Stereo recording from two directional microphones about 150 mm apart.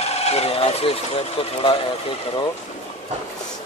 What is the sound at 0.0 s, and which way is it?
Speech, 45° left (ahead or behind).